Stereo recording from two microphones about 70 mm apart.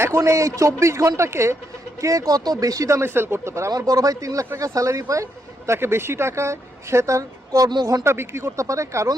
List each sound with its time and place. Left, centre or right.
0.0 s speech: right
3.0 s speech: right
3.7 s speech: right
8.0 s speech: right